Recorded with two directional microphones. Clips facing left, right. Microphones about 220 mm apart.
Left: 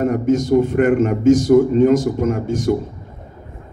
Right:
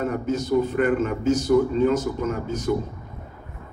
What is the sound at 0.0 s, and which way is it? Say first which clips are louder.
A man's voice: left 8 dB; 50° left (ahead or behind).